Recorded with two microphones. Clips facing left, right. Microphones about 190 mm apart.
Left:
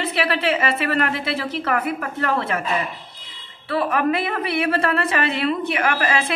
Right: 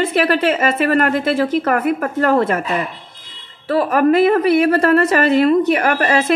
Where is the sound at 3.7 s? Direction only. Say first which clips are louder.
Right 7 dB; 40° right (ahead or behind).